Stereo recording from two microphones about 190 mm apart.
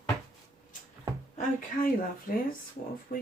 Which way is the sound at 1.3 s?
45° left (ahead or behind).